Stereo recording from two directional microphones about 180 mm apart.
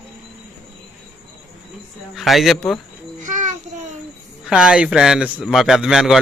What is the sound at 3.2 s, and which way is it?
Child singing, 45° right (ahead or behind).